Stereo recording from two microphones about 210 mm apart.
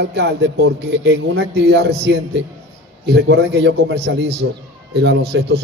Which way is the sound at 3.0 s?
55° right (ahead or behind).